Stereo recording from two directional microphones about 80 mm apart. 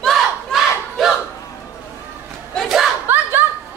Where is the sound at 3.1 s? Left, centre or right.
Right.